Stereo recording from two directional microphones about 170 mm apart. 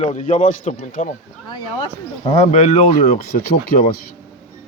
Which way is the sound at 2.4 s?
40° left (ahead or behind).